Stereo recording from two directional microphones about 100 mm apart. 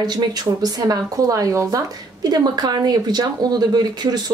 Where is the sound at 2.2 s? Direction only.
45° right (ahead or behind).